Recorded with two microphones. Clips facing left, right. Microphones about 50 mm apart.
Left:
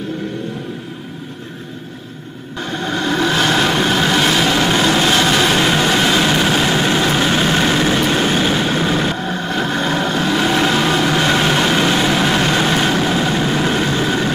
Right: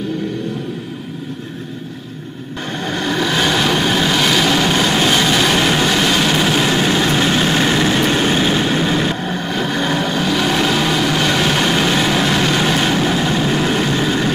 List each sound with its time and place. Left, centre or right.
2.9 s vehicle: left
5.6 s vehicle: left
12.1 s vehicle: centre
12.4 s vehicle: left